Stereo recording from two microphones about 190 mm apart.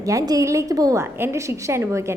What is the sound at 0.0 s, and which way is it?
A woman's voice, 20° right (ahead or behind).